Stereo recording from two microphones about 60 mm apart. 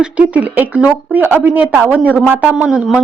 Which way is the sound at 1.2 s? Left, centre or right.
Right.